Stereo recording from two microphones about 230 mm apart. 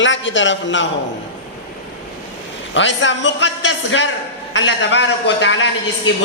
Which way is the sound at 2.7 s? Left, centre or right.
Left.